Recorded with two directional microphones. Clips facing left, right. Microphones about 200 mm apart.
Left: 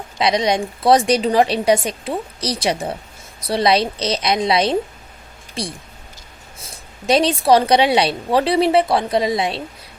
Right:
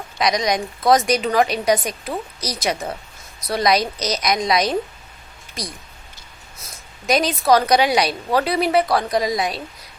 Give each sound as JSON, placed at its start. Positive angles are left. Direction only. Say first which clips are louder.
{"t": 0.2, "sound": "a woman's voice", "louder": "left 2 dB", "side_deg": 30}